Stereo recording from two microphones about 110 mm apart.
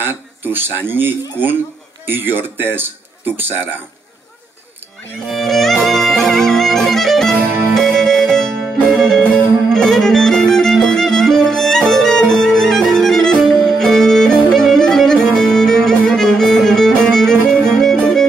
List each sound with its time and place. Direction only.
0.0 s a man's voice: 20° right (ahead or behind)
5.3 s music: centre (ahead or behind)
17.7 s violin: 5° left (ahead or behind)